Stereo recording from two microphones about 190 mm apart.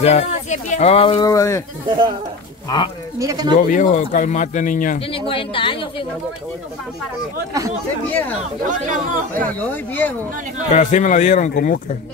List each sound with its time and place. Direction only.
0.0 s speech: 35° left (ahead or behind); by 1.6 s 15° left (ahead or behind)
1.9 s speech: 25° right (ahead or behind)
3.2 s speech: 20° right (ahead or behind)
3.5 s speech: 45° left (ahead or behind)
5.0 s speech: 30° left (ahead or behind)
8.1 s speech: 10° left (ahead or behind)
8.6 s speech: 40° right (ahead or behind)
9.6 s speech: 10° left (ahead or behind)
10.7 s speech: 40° left (ahead or behind)